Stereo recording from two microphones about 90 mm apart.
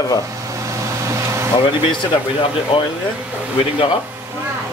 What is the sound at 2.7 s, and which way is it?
Speech, 75° left (ahead or behind).